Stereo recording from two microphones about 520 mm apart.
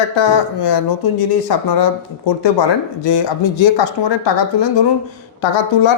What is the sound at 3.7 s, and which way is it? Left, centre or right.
Speech, left.